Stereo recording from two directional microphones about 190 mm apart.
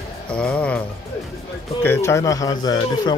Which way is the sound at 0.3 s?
5° left (ahead or behind).